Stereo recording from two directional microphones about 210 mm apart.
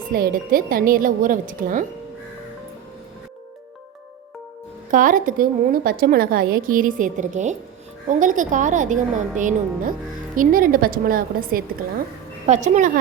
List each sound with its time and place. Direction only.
0.1 s a woman's voice: 45° right (ahead or behind)
4.9 s a woman's voice: 40° right (ahead or behind)